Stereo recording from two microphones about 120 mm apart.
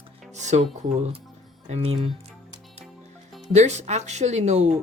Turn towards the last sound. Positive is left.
turn(degrees=-70)  # may be behind; listen again after turning